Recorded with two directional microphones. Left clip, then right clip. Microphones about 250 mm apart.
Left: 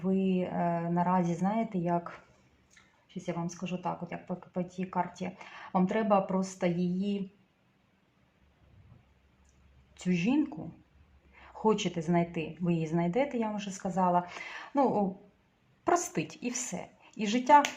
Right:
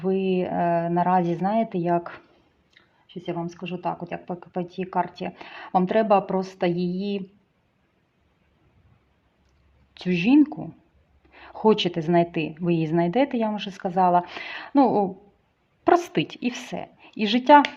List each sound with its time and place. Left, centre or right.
0.0 s speech: right
3.2 s speech: right
9.9 s speech: right